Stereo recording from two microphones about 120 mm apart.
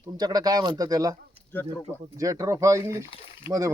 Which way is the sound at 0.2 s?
35° right (ahead or behind).